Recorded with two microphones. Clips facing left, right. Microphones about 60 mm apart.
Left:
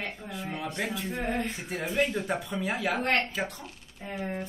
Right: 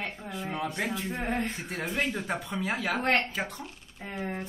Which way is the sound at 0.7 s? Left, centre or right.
Centre.